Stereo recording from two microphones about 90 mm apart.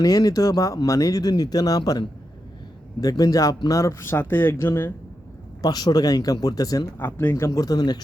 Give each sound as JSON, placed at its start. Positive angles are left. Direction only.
{"t": 0.0, "sound": "speech", "side_deg": 45}
{"t": 5.6, "sound": "speech", "side_deg": 45}
{"t": 7.0, "sound": "speech", "side_deg": 25}
{"t": 7.3, "sound": "speech", "side_deg": 35}